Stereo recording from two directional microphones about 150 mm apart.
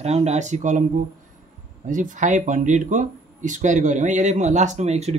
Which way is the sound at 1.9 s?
60° right (ahead or behind).